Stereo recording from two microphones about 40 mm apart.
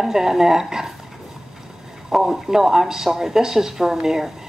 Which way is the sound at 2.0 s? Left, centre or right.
Centre.